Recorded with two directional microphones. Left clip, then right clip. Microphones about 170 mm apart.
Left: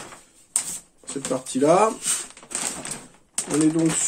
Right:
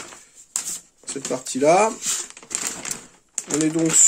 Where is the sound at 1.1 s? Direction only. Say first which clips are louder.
Even; 35° right (ahead or behind).